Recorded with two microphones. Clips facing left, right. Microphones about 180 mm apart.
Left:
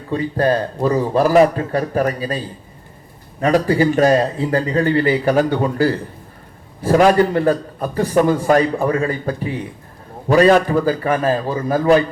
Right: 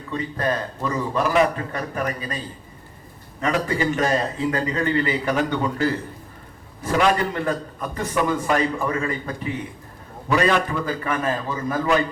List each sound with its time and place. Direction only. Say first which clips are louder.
0.1 s a man's voice: left 8 dB; 35° left (ahead or behind)
3.4 s a man's voice: left 7 dB; 35° left (ahead or behind)